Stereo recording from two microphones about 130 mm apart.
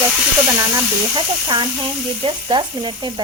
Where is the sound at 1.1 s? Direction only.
35° right (ahead or behind).